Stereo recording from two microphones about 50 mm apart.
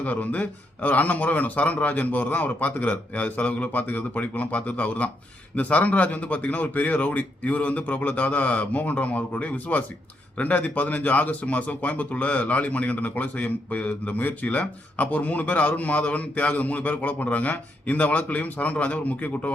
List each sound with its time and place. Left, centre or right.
0.0 s speech: left